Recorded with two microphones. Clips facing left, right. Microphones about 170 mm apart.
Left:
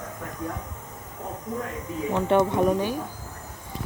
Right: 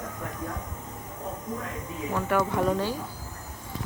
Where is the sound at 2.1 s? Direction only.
20° left (ahead or behind).